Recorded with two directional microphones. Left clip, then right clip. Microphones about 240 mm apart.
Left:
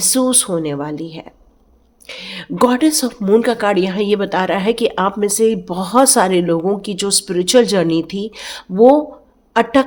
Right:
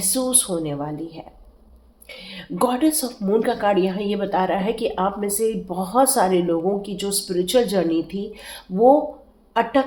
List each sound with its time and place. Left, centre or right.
0.1 s speech: left